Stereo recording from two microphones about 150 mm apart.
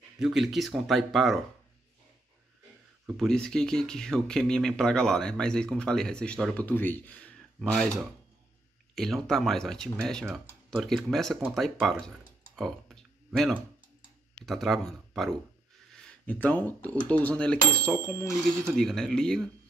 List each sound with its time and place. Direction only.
0.2 s speech: centre (ahead or behind)
3.1 s speech: centre (ahead or behind)
12.5 s a sound: centre (ahead or behind)
14.4 s speech: centre (ahead or behind)